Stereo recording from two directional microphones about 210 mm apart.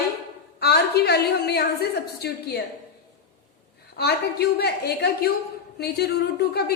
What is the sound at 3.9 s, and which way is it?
A woman's voice, 50° left (ahead or behind).